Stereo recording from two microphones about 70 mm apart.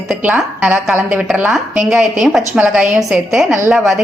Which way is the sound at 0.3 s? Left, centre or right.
Centre.